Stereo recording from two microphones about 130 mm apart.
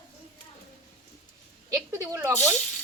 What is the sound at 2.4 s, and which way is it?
Speech, 10° left (ahead or behind).